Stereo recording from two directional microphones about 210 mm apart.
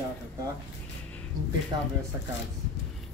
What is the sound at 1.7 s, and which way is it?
Speech, 20° right (ahead or behind).